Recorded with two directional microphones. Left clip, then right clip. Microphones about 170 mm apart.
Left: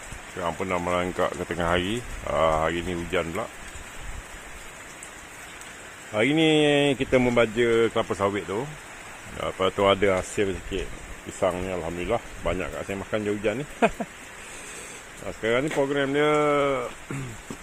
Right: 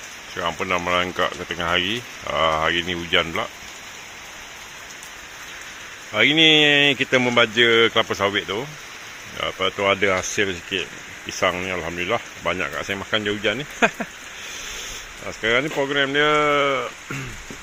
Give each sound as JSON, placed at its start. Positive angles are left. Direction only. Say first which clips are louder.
{"t": 0.3, "sound": "speech", "louder": "right 4 dB", "side_deg": 5}
{"t": 6.1, "sound": "speech", "louder": "right 6 dB", "side_deg": 5}
{"t": 9.4, "sound": "speech", "louder": "right 1 dB", "side_deg": 20}
{"t": 10.1, "sound": "speech", "louder": "right 3 dB", "side_deg": 5}
{"t": 15.3, "sound": "speech", "louder": "right 4 dB", "side_deg": 5}